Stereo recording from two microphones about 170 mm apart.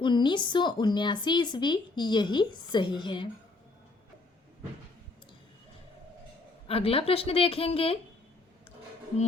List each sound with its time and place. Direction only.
0.0 s speech: 25° left (ahead or behind)
6.7 s a woman's voice: 35° left (ahead or behind)